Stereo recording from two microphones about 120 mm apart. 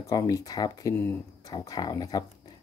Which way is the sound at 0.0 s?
30° left (ahead or behind).